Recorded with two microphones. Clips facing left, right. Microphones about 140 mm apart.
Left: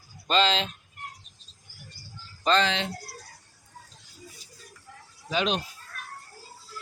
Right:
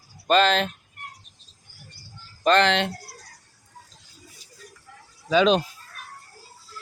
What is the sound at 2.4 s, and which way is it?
Speech, 60° right (ahead or behind).